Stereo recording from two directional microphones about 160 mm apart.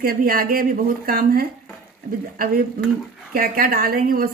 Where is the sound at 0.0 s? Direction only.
70° right (ahead or behind).